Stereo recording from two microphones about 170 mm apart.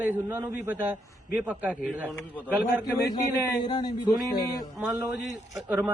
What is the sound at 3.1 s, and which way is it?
A man's voice, 25° left (ahead or behind).